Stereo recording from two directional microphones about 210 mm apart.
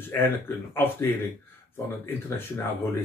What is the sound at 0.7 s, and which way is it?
Speech, 10° left (ahead or behind).